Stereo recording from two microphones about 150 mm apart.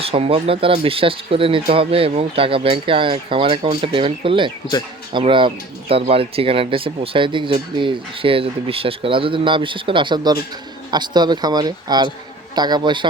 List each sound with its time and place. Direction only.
0.0 s speech: 40° right (ahead or behind)